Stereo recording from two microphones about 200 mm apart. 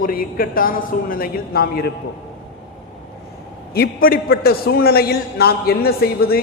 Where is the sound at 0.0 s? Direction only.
45° left (ahead or behind).